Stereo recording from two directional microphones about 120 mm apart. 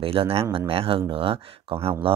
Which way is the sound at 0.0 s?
50° right (ahead or behind).